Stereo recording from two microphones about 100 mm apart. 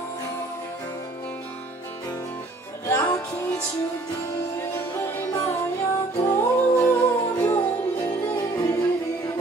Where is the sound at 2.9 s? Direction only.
30° left (ahead or behind).